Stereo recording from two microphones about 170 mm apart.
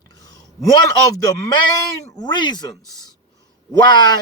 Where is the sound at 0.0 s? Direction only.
20° left (ahead or behind).